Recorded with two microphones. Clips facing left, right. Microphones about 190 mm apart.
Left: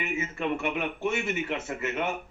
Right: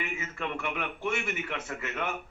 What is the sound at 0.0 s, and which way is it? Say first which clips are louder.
Speech: left 5 dB; 25° left (ahead or behind).